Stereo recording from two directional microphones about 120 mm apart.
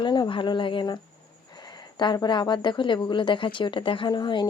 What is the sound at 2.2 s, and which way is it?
Speech, 40° left (ahead or behind).